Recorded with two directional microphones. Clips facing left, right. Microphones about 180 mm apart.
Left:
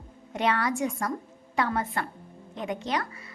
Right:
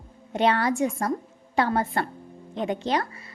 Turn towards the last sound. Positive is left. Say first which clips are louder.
# right 4 dB
turn(degrees=-30)  # may be behind; listen again after turning